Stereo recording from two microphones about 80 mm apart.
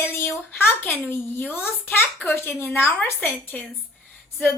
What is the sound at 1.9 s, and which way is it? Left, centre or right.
Speech, left.